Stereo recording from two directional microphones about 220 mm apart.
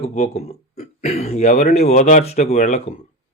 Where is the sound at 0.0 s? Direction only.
30° left (ahead or behind).